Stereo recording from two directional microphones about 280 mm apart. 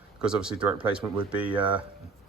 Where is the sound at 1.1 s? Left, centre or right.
Centre.